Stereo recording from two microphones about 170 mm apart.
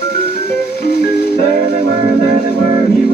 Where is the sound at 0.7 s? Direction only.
70° left (ahead or behind).